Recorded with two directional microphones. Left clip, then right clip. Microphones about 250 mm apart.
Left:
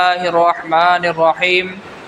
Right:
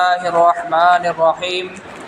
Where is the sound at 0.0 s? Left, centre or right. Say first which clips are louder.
Even; left.